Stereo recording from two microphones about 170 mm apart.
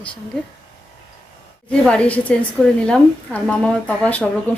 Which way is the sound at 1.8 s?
5° left (ahead or behind).